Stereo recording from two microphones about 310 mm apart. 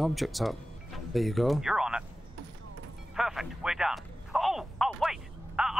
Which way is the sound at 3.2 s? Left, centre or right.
Centre.